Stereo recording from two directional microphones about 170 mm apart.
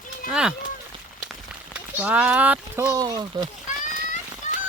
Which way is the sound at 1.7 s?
5° right (ahead or behind).